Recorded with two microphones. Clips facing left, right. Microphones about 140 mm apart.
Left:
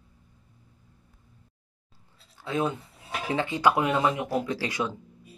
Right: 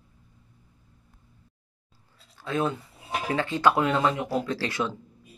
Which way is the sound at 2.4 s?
20° left (ahead or behind).